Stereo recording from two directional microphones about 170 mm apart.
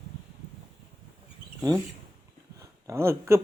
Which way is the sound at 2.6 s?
15° right (ahead or behind).